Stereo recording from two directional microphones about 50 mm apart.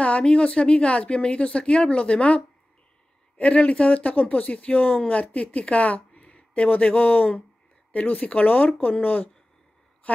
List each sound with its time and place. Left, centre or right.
0.0 s speech: left